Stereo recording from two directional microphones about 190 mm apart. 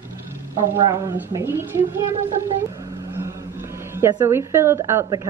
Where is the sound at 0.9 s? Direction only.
15° right (ahead or behind).